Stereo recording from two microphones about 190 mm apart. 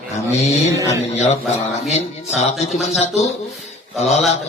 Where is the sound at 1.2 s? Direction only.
35° left (ahead or behind).